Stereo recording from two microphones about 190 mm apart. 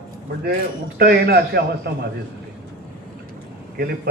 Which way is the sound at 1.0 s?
55° right (ahead or behind).